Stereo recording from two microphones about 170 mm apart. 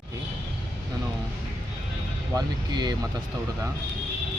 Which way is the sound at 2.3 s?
25° right (ahead or behind).